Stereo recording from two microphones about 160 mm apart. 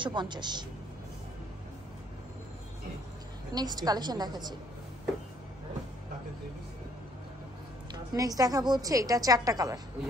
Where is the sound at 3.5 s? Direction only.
25° right (ahead or behind).